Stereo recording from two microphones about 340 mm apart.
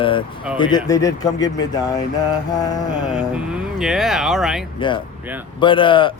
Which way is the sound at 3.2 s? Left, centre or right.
Centre.